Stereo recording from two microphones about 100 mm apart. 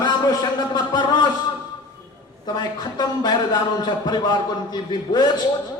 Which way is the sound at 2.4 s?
45° left (ahead or behind).